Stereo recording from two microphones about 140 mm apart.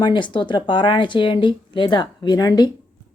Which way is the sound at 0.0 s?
35° left (ahead or behind).